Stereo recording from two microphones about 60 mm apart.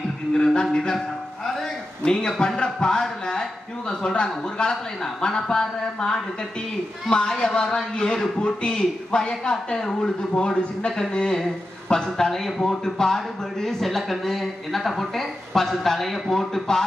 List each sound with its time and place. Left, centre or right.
0.3 s a man's voice: centre
1.5 s a sound: centre
3.8 s a man's voice: centre